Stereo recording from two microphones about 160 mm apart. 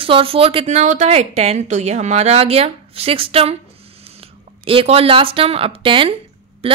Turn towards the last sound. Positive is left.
turn(degrees=-35)  # may be behind; listen again after turning